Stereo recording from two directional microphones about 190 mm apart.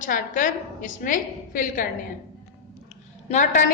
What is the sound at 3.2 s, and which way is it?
Speech, 40° left (ahead or behind).